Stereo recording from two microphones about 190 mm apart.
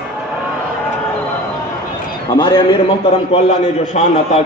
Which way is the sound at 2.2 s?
25° left (ahead or behind).